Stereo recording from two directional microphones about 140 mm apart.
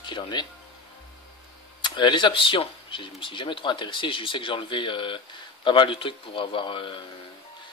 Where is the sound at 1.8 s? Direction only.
35° left (ahead or behind).